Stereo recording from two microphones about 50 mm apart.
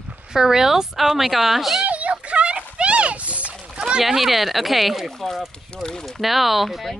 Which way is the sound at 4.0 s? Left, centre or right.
Centre.